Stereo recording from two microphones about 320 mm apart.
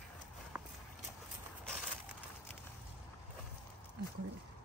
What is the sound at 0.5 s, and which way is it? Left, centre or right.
Horse, centre.